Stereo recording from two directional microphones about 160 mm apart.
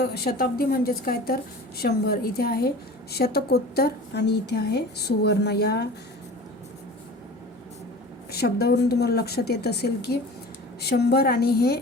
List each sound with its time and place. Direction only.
0.0 s a woman's voice: 85° left
8.3 s speech: 80° left